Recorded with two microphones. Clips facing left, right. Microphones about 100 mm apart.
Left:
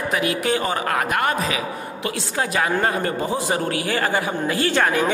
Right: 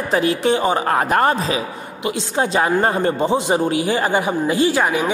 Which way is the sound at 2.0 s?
20° right (ahead or behind).